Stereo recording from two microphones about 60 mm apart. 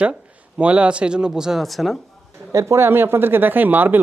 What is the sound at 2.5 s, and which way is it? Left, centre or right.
Speech, right.